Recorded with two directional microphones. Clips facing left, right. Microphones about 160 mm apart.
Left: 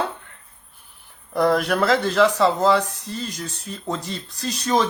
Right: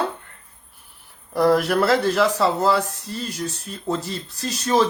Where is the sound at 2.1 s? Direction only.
30° right (ahead or behind).